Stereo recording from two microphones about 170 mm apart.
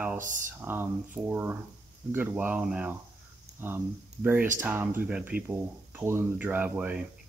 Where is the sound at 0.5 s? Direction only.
15° right (ahead or behind).